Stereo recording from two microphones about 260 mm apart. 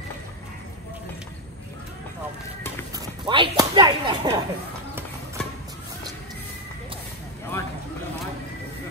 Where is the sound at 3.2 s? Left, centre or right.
Centre.